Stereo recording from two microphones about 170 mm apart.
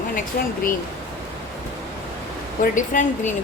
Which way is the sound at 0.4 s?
60° left (ahead or behind).